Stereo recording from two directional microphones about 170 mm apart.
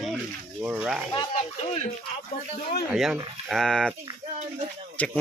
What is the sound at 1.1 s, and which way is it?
Speech, 40° left (ahead or behind).